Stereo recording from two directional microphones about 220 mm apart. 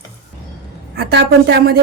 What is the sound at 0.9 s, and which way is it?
Speech, 50° right (ahead or behind).